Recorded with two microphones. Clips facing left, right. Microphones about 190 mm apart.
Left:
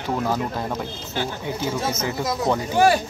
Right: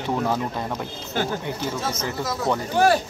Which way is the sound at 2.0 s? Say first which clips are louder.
Left 1 dB; 15° left (ahead or behind).